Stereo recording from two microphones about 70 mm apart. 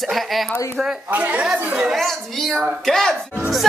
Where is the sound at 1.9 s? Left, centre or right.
Centre.